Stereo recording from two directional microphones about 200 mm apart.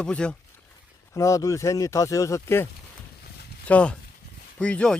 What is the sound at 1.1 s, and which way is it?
Speech, 15° left (ahead or behind).